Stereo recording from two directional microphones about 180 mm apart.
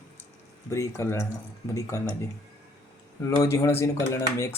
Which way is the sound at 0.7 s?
15° left (ahead or behind).